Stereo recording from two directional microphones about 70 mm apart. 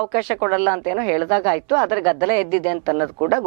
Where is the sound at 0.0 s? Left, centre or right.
Centre.